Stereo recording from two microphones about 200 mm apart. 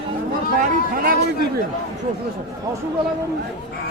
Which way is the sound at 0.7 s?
45° right (ahead or behind).